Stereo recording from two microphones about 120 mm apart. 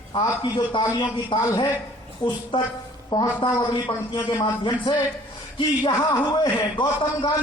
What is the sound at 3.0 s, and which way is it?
A man's voice, 35° left (ahead or behind).